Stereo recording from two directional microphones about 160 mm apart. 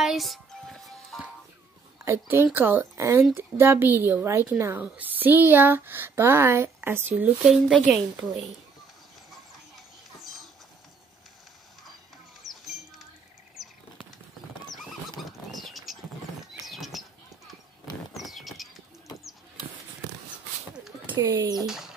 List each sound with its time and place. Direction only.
0.0 s music: centre (ahead or behind)
2.0 s speech: 15° right (ahead or behind)
10.2 s a sound: centre (ahead or behind)
12.4 s music: centre (ahead or behind)
15.1 s bird: centre (ahead or behind)
16.5 s a sound: centre (ahead or behind)
18.1 s a sound: centre (ahead or behind)
21.2 s speech: 25° right (ahead or behind)
21.5 s speech: 5° right (ahead or behind)